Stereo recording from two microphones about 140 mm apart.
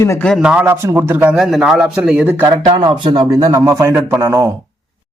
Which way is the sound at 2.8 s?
35° right (ahead or behind).